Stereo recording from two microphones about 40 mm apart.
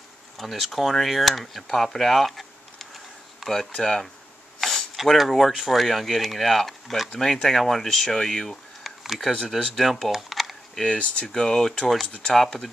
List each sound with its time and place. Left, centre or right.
0.4 s speech: centre
2.0 s a sound: centre
3.8 s speech: centre
4.6 s a sound: centre
5.0 s speech: centre
8.8 s a sound: centre
9.5 s speech: centre
10.8 s speech: left
11.3 s speech: centre